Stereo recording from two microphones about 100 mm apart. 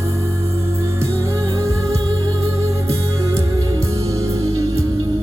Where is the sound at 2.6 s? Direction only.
30° right (ahead or behind).